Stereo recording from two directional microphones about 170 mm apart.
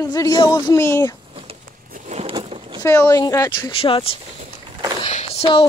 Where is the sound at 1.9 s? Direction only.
40° right (ahead or behind).